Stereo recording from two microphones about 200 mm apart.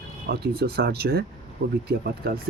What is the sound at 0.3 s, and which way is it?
Speech, 50° right (ahead or behind).